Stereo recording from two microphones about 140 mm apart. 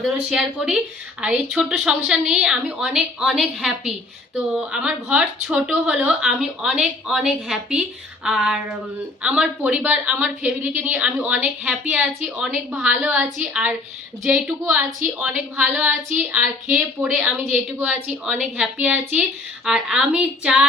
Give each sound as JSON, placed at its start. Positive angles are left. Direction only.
{"t": 0.0, "sound": "a woman's voice", "side_deg": -5}
{"t": 17.2, "sound": "a woman's voice", "side_deg": -10}